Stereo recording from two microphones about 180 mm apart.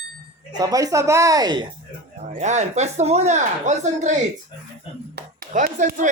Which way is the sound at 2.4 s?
40° right (ahead or behind).